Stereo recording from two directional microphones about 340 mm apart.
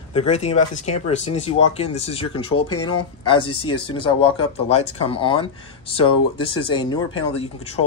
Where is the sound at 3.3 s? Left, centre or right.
Centre.